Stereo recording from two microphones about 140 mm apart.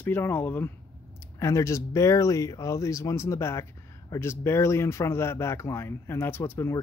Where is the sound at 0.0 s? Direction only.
15° left (ahead or behind).